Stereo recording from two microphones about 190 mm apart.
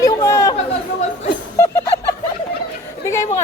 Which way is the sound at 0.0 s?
15° left (ahead or behind).